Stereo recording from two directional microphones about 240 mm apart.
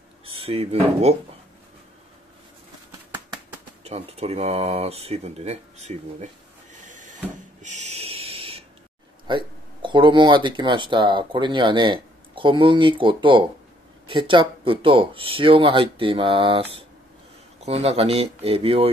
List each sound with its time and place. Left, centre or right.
0.4 s speech: right
3.8 s speech: right
6.8 s a sound: right
7.6 s owl: right
9.3 s speech: centre